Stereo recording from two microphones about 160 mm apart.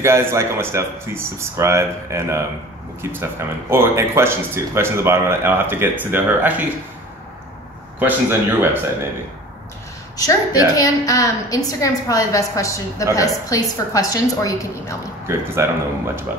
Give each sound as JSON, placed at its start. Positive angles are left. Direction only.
{"t": 0.0, "sound": "speech", "side_deg": -15}
{"t": 8.0, "sound": "speech", "side_deg": -15}
{"t": 10.1, "sound": "a woman's voice", "side_deg": 20}
{"t": 15.2, "sound": "speech", "side_deg": -15}